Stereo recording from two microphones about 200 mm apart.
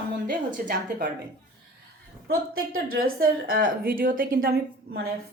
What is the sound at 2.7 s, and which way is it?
A woman's voice, 45° right (ahead or behind).